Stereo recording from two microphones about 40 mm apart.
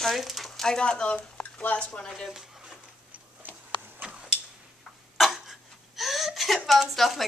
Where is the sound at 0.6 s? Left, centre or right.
Centre.